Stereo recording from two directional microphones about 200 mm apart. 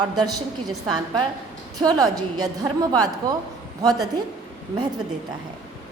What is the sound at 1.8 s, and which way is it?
A woman's voice, 20° right (ahead or behind).